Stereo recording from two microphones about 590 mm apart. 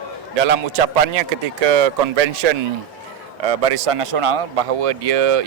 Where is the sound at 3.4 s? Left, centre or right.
Right.